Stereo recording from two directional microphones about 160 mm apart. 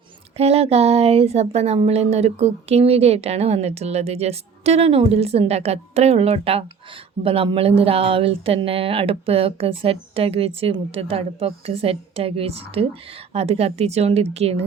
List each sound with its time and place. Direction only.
0.3 s speech: 40° right (ahead or behind)